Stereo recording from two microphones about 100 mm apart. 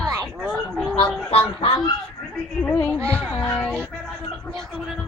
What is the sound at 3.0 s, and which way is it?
Speech, 25° right (ahead or behind).